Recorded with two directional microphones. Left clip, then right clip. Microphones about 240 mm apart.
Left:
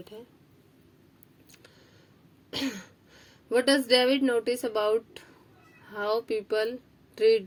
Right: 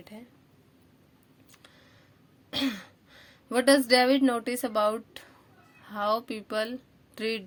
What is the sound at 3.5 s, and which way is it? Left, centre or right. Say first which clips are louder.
Speech: right 1 dB; right.